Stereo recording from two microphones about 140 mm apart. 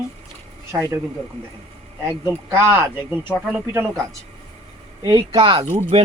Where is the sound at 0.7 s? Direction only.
15° right (ahead or behind).